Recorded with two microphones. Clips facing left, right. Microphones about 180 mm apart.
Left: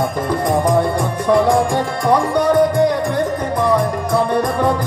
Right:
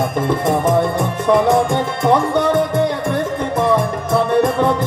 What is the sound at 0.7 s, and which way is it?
Music, 20° right (ahead or behind).